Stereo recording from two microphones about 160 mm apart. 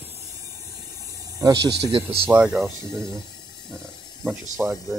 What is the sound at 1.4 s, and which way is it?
Speech, 25° right (ahead or behind).